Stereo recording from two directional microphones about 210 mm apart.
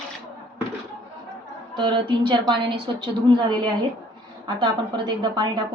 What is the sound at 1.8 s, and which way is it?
A woman's voice, 20° right (ahead or behind).